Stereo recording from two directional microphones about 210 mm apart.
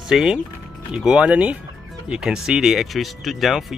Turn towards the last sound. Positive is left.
turn(degrees=0)  # may be behind; listen again after turning